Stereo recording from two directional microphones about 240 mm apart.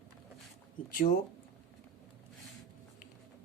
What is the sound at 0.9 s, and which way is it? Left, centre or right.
Speech, left.